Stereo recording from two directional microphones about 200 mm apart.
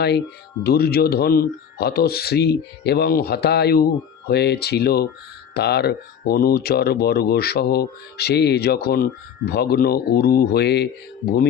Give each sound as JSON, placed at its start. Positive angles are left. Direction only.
{"t": 0.6, "sound": "speech", "side_deg": 50}